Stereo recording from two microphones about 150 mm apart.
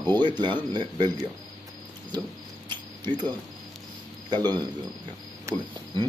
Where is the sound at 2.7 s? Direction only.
30° right (ahead or behind).